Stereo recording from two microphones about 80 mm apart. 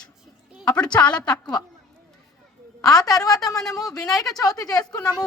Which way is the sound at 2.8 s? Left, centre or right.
Left.